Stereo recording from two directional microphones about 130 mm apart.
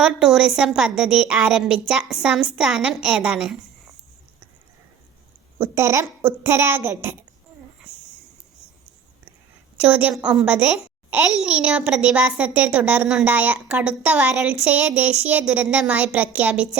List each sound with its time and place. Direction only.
0.0 s a woman's voice: 5° right (ahead or behind)
5.5 s a child's voice: 20° right (ahead or behind)
9.8 s a child's voice: 10° right (ahead or behind)